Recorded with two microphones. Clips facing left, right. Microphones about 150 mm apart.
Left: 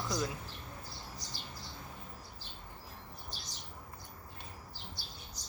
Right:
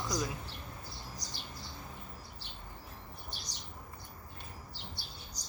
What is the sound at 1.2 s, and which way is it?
Bird, 40° right (ahead or behind).